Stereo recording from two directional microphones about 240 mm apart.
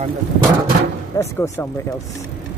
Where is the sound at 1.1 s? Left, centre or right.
Centre.